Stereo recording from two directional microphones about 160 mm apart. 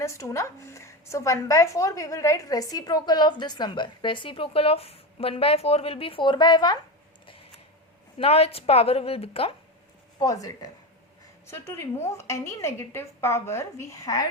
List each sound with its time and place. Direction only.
0.0 s a woman's voice: 20° left (ahead or behind)
8.2 s a woman's voice: 40° left (ahead or behind)
10.2 s a woman's voice: 20° left (ahead or behind)